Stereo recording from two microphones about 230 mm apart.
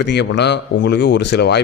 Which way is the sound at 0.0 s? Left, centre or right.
Left.